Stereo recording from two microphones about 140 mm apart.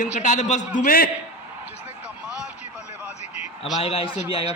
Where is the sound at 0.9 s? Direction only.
90° left.